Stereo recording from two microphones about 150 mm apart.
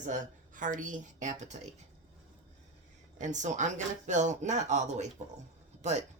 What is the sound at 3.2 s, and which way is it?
Speech, 55° right (ahead or behind).